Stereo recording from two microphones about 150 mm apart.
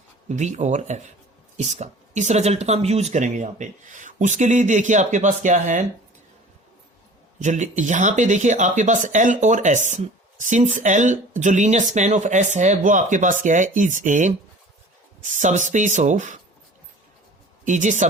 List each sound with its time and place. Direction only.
0.3 s speech: 50° right (ahead or behind)
7.3 s speech: 55° right (ahead or behind)
17.7 s speech: 55° right (ahead or behind)